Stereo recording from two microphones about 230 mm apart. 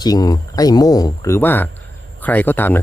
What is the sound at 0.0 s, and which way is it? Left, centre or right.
Speech, centre.